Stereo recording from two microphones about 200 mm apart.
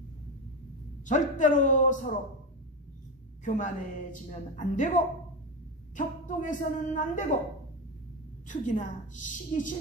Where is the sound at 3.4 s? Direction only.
40° left (ahead or behind).